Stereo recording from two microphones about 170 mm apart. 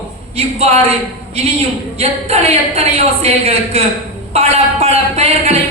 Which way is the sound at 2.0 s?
35° right (ahead or behind).